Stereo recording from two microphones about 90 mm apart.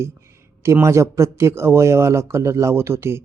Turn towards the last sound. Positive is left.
turn(degrees=-30)  # may be behind; listen again after turning